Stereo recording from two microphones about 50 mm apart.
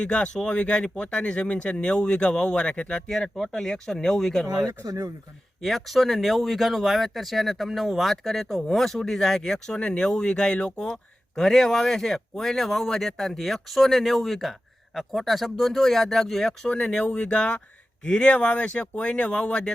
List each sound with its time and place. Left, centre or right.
0.0 s speech: left
5.6 s speech: centre